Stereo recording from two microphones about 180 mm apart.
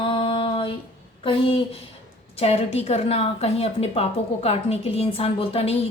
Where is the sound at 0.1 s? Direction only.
30° left (ahead or behind).